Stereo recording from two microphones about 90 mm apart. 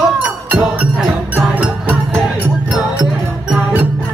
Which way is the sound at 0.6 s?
10° right (ahead or behind).